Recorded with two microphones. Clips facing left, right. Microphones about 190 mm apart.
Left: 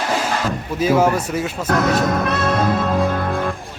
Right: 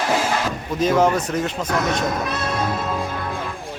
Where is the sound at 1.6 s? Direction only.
50° left (ahead or behind).